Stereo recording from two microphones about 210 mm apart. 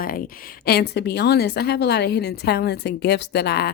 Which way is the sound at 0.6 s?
50° left (ahead or behind).